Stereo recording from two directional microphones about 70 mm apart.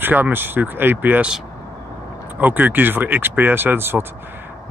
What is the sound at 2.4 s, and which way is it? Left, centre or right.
Speech, right.